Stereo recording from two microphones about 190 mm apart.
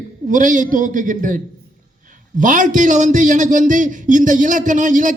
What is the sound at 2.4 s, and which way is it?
A man's voice, 45° right (ahead or behind).